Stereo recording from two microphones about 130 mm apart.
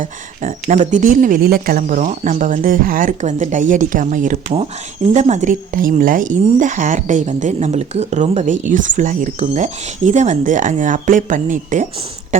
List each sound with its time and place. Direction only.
0.7 s a woman's voice: 75° right (ahead or behind)